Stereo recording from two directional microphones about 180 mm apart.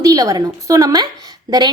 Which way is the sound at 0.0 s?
20° right (ahead or behind).